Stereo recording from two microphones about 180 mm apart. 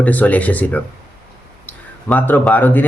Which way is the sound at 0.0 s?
10° left (ahead or behind).